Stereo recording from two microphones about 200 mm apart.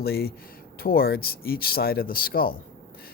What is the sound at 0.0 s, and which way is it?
Speech, 50° left (ahead or behind).